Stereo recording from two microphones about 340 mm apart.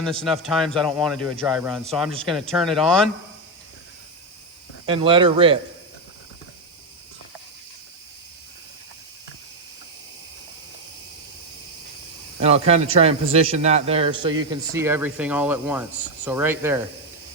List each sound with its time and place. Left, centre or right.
0.0 s speech: centre
4.9 s speech: centre
12.4 s speech: centre